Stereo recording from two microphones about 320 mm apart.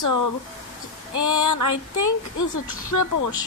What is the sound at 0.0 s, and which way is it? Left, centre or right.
Speech, left.